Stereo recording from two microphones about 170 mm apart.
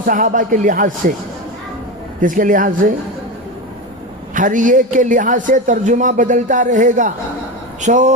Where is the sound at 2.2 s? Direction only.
50° right (ahead or behind).